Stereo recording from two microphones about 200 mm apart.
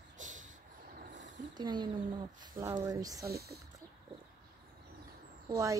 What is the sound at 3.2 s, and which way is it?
Speech, 50° right (ahead or behind).